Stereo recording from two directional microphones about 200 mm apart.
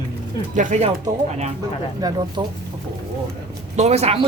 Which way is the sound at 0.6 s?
40° right (ahead or behind).